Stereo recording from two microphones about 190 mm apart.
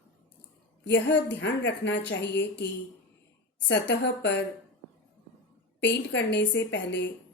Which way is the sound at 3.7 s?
65° left (ahead or behind).